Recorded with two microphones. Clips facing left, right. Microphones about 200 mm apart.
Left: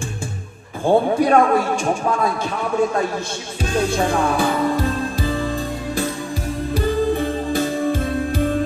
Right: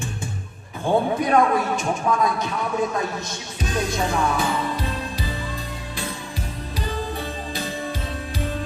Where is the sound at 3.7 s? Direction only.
30° left (ahead or behind).